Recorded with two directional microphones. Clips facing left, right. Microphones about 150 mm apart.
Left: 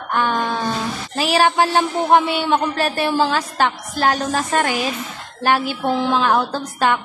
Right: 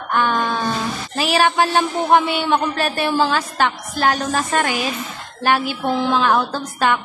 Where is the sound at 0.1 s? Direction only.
30° left (ahead or behind).